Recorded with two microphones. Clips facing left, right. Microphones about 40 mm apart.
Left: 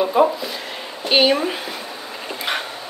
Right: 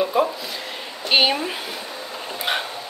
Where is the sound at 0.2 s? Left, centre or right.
Centre.